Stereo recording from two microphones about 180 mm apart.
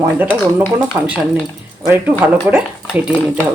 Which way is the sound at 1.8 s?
10° right (ahead or behind).